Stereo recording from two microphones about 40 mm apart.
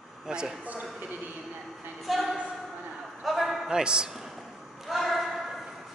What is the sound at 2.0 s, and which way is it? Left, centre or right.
A man's voice, centre.